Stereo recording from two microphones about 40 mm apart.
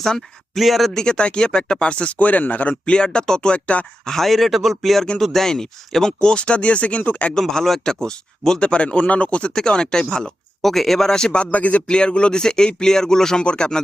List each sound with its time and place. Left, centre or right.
0.0 s speech: centre
0.9 s speech: left
2.1 s speech: left
2.9 s speech: left
4.0 s speech: centre; by 7.3 s left
7.3 s speech: centre; by 9.5 s left
9.6 s speech: centre
10.6 s speech: centre
11.1 s speech: left
11.5 s speech: left
11.9 s speech: left